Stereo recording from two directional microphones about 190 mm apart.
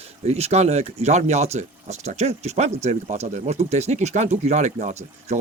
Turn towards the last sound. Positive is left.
turn(degrees=-35)  # may be behind; listen again after turning